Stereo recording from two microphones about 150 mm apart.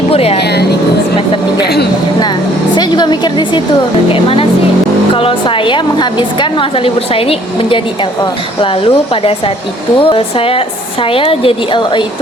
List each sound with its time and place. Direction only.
0.1 s speech: 40° left (ahead or behind)
1.6 s speech: 90° left
2.7 s a woman's voice: 30° left (ahead or behind)